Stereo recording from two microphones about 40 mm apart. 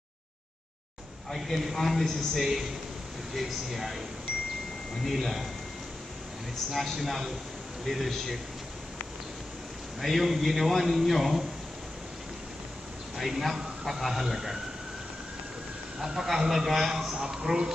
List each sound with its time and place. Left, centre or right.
1.3 s a man's voice: centre
5.0 s a man's voice: centre
6.7 s a man's voice: centre
9.9 s a man's voice: centre
13.2 s a man's voice: centre
16.0 s a man's voice: centre
17.2 s speech: centre